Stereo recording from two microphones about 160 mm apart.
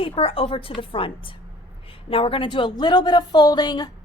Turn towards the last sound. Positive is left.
turn(degrees=25)  # may be behind; listen again after turning